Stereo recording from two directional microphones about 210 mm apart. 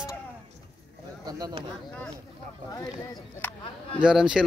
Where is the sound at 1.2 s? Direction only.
25° right (ahead or behind).